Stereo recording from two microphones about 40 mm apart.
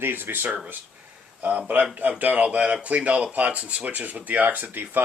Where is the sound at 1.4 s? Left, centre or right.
Right.